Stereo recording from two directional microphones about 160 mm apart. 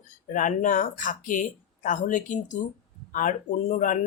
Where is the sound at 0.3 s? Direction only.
55° left (ahead or behind).